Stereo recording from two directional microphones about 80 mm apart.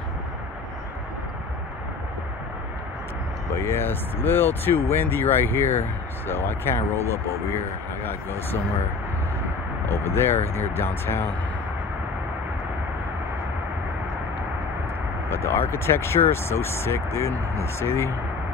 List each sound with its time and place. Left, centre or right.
3.5 s speech: left
9.8 s speech: left
15.2 s speech: left